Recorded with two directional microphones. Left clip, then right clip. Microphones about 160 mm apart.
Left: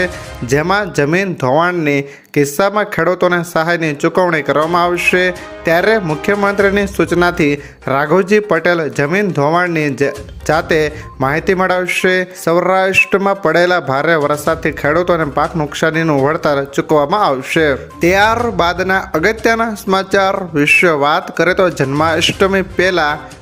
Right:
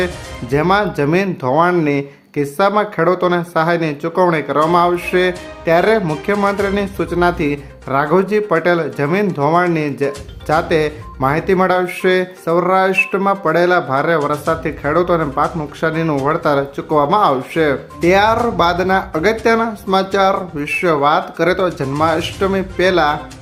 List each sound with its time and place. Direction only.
0.5 s speech: 25° left (ahead or behind)